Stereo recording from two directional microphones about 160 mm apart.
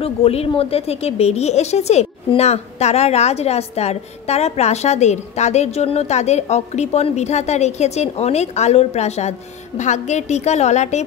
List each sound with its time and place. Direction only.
0.0 s a woman's voice: 40° left (ahead or behind)